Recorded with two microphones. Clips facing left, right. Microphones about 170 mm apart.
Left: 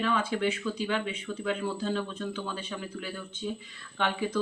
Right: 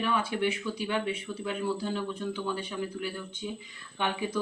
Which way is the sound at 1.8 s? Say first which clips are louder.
Left 1 dB; 15° right (ahead or behind).